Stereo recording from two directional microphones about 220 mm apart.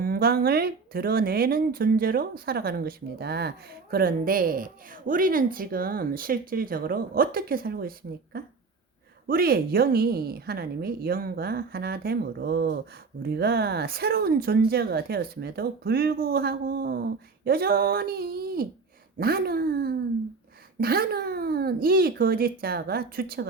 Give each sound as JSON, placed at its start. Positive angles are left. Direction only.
{"t": 0.0, "sound": "a woman's voice", "side_deg": -45}